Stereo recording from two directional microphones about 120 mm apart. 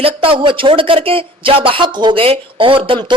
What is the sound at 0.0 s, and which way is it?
Speech, 50° right (ahead or behind).